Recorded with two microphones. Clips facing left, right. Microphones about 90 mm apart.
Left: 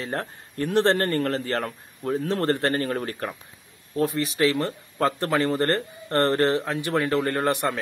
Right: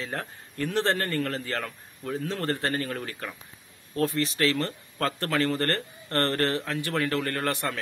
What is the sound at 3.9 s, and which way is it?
Speech, 15° left (ahead or behind).